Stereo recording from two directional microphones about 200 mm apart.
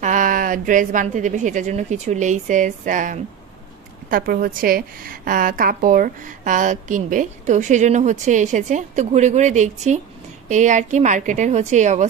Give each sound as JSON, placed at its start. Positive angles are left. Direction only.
{"t": 0.0, "sound": "a woman's voice", "side_deg": -40}